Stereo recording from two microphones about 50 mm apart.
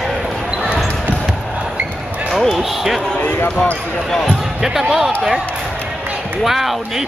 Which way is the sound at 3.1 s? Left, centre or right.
Left.